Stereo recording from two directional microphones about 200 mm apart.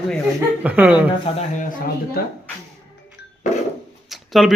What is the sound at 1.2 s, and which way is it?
Speech, 35° left (ahead or behind).